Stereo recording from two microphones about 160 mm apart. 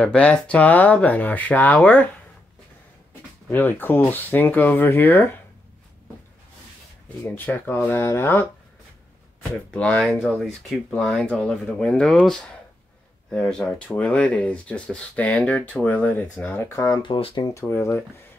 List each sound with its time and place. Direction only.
0.0 s speech: 5° left (ahead or behind)
3.4 s speech: 10° left (ahead or behind)
7.2 s speech: 10° left (ahead or behind)
9.7 s speech: 5° left (ahead or behind)
17.0 s speech: 35° left (ahead or behind)
17.6 s speech: 15° left (ahead or behind)